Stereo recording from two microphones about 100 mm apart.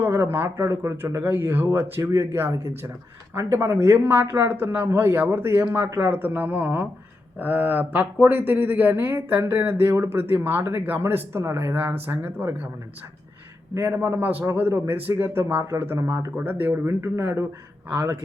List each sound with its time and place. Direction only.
0.0 s speech: 25° right (ahead or behind)
13.7 s speech: 25° right (ahead or behind)